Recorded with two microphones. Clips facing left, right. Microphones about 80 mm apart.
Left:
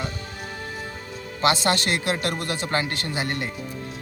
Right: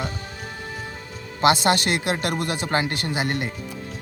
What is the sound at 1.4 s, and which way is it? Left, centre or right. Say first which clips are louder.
Speech: right 3 dB; right.